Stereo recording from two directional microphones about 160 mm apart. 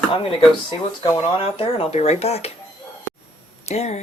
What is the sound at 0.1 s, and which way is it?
Speech, 35° left (ahead or behind).